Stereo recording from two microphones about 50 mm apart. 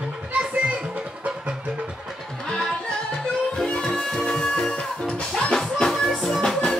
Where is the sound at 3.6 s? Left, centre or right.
Centre.